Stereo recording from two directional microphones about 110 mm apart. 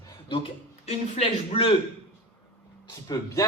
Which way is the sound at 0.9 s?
75° left (ahead or behind).